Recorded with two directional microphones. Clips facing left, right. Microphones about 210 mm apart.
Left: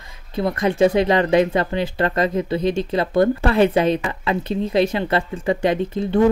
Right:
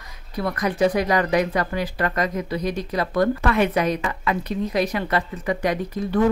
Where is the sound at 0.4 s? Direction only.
25° left (ahead or behind).